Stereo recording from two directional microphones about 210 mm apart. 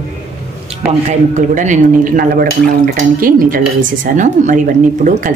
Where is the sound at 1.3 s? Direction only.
35° right (ahead or behind).